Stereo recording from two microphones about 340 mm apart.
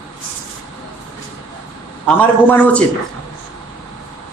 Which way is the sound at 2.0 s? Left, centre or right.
Centre.